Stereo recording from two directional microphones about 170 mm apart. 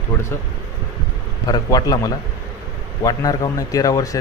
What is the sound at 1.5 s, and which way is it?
A man's voice, 20° left (ahead or behind).